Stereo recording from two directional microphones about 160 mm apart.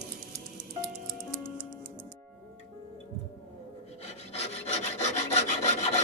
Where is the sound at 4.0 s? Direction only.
40° left (ahead or behind).